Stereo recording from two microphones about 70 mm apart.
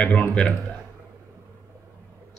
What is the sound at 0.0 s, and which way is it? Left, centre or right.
Speech, centre.